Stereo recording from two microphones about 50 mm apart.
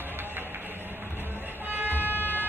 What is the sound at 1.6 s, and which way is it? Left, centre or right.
Vehicle, right.